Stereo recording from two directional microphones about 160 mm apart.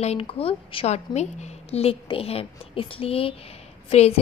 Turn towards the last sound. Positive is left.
turn(degrees=40)  # may be behind; listen again after turning